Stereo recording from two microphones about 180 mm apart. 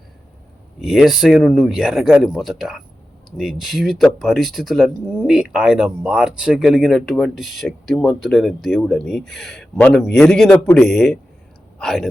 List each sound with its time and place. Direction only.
0.8 s speech: 5° right (ahead or behind)